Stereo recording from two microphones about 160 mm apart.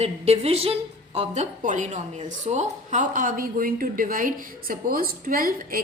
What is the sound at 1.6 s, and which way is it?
A woman's voice, 55° right (ahead or behind).